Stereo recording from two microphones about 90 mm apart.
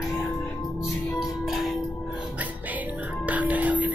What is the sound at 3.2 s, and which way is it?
Music, 15° right (ahead or behind).